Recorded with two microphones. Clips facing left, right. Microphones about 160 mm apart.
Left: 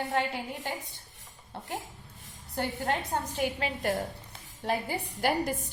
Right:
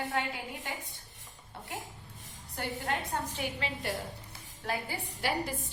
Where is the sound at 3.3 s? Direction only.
45° left (ahead or behind).